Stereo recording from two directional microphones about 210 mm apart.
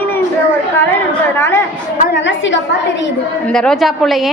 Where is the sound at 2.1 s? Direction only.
60° left (ahead or behind).